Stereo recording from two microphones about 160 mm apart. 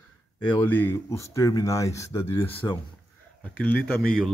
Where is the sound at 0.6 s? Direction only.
15° left (ahead or behind).